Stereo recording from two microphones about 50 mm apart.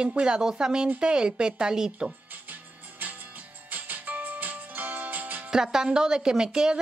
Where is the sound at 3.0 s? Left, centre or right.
Right.